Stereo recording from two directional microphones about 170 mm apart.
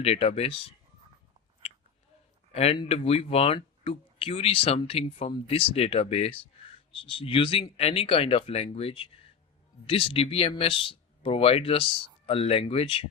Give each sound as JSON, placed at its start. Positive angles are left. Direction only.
{"t": 0.0, "sound": "speech", "side_deg": 35}
{"t": 2.5, "sound": "speech", "side_deg": 40}